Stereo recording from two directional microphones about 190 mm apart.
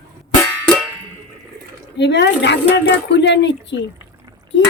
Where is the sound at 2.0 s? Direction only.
65° left (ahead or behind).